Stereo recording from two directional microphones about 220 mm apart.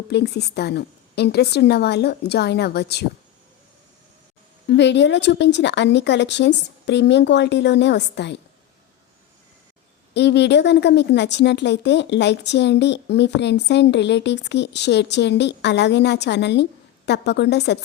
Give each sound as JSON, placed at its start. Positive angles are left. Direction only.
{"t": 0.1, "sound": "a woman's voice", "side_deg": 50}
{"t": 4.7, "sound": "a woman's voice", "side_deg": 55}
{"t": 10.2, "sound": "a woman's voice", "side_deg": 50}